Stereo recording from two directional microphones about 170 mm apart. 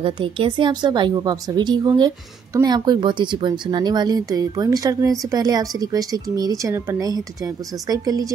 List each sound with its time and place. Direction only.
0.0 s a woman's voice: 30° right (ahead or behind)